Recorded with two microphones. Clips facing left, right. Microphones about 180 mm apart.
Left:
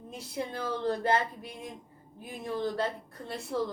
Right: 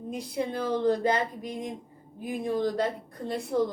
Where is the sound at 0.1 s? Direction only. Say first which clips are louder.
Right 5 dB; 15° right (ahead or behind).